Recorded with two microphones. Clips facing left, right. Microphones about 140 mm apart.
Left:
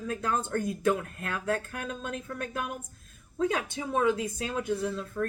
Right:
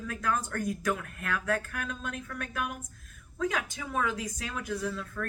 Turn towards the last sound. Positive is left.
turn(degrees=25)  # may be behind; listen again after turning